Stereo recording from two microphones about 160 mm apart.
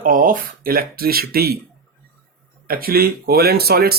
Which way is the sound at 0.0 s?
60° right (ahead or behind).